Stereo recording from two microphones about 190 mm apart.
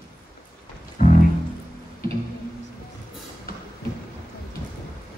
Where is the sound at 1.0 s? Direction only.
45° left (ahead or behind).